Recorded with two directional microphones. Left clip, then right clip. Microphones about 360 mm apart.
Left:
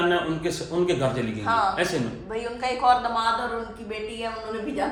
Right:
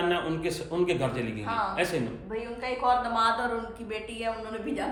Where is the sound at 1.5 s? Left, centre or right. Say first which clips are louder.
Left 6 dB; left.